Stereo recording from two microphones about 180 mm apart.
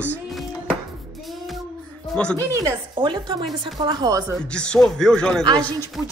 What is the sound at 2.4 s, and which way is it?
Speech, 15° right (ahead or behind).